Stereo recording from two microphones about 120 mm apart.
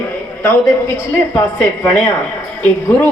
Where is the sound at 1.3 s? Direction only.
25° left (ahead or behind).